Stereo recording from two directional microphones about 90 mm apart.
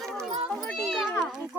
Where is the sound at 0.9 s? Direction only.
5° left (ahead or behind).